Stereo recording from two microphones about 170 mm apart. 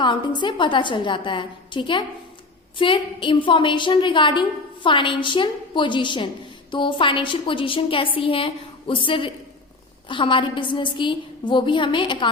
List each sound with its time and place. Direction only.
0.0 s a woman's voice: 25° left (ahead or behind)